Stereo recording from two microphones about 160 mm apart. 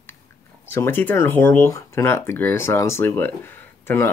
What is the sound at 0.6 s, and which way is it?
Speech, 15° left (ahead or behind).